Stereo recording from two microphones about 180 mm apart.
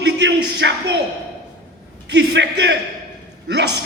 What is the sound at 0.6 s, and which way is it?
Speech, 80° right.